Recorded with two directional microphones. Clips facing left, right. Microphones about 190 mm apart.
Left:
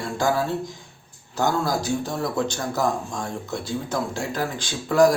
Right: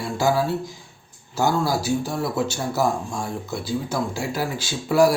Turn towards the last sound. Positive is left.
turn(degrees=-5)  # may be behind; listen again after turning